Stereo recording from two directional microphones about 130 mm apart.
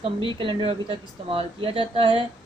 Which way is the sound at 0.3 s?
40° right (ahead or behind).